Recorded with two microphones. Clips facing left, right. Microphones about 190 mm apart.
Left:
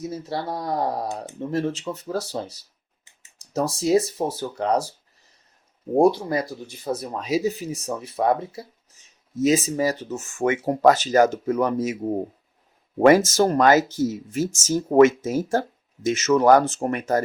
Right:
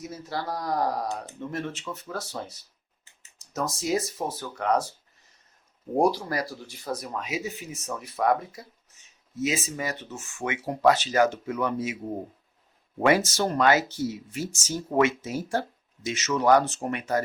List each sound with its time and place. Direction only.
0.0 s speech: 30° left (ahead or behind)
6.0 s speech: 25° left (ahead or behind); by 11.9 s 40° left (ahead or behind)
13.0 s speech: 45° left (ahead or behind)